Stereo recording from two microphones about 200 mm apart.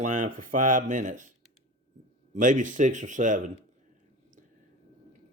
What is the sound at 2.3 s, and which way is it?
Speech, 40° right (ahead or behind).